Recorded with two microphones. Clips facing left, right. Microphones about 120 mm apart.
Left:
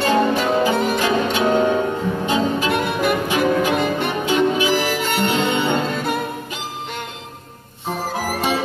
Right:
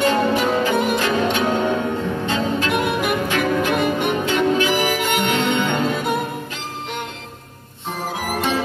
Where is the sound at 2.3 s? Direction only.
15° left (ahead or behind).